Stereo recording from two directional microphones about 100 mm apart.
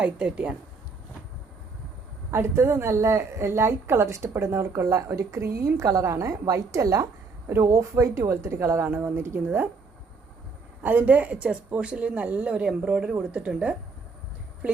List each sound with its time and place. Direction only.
0.0 s speech: 10° right (ahead or behind)
2.3 s a woman's voice: 25° right (ahead or behind)
10.8 s speech: 15° right (ahead or behind)